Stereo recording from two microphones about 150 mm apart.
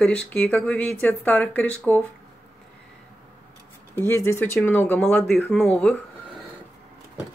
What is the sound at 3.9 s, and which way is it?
Speech, 15° left (ahead or behind).